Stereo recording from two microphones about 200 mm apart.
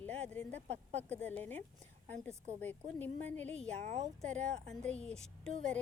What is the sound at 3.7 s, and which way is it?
Speech, 35° right (ahead or behind).